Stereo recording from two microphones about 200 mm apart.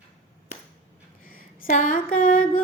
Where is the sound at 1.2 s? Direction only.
45° left (ahead or behind).